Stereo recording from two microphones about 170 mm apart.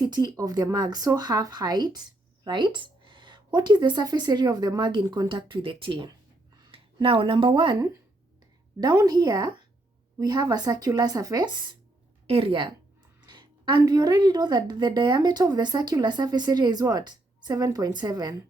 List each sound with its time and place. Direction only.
0.0 s a woman's voice: 25° right (ahead or behind)